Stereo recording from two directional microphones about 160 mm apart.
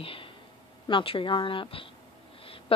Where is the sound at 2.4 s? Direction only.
35° left (ahead or behind).